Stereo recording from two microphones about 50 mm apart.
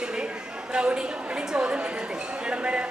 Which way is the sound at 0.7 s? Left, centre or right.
Right.